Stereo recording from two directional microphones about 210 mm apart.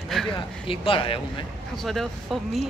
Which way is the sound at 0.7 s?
25° left (ahead or behind).